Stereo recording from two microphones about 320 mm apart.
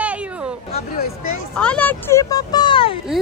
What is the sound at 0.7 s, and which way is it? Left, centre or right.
Speech, left.